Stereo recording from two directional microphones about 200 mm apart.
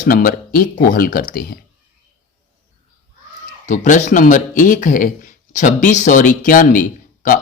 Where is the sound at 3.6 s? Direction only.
40° left (ahead or behind).